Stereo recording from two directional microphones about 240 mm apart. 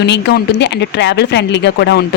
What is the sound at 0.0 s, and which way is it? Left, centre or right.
Speech, left.